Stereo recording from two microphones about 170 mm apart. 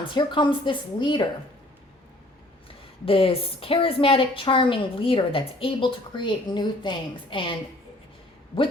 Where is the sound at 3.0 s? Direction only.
35° left (ahead or behind).